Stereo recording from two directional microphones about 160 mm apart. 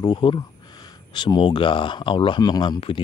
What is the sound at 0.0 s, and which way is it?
Speech, 30° left (ahead or behind).